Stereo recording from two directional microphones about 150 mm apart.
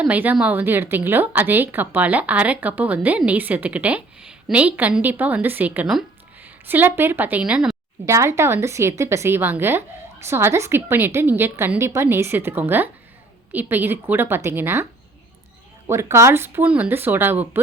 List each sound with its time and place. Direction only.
0.0 s speech: 10° right (ahead or behind)
8.0 s speech: 20° right (ahead or behind)
15.9 s speech: 20° right (ahead or behind)